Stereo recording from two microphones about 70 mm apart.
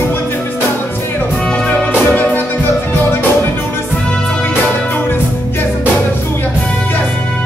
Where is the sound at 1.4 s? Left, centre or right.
Left.